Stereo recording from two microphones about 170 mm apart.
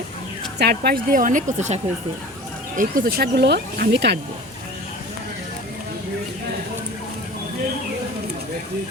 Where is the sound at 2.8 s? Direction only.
60° right (ahead or behind); by 4.1 s 90° right.